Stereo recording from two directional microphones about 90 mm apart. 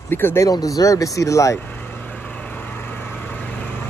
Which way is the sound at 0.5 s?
40° left (ahead or behind).